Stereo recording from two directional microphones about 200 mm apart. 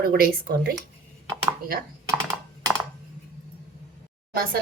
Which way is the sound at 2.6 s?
15° right (ahead or behind).